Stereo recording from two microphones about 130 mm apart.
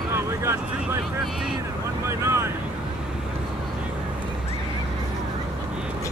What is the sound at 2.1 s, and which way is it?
Speech, 20° right (ahead or behind).